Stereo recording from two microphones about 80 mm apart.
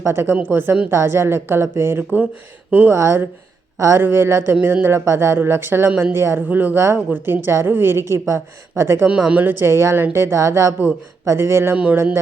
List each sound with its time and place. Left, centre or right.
0.0 s speech: right
2.9 s speech: right
4.0 s speech: right
9.0 s speech: centre; by 11.8 s right